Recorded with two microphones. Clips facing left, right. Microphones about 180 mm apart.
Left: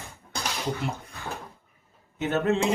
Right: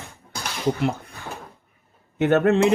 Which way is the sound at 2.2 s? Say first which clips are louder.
Right 7 dB; 60° right (ahead or behind).